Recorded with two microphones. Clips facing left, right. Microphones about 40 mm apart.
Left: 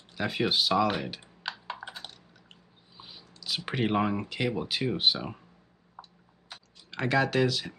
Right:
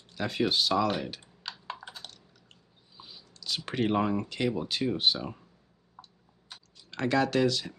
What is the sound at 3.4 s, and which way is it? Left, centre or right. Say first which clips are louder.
Speech: even; centre.